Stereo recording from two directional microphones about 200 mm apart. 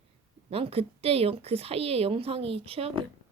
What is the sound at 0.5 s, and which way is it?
A woman's voice, 30° right (ahead or behind).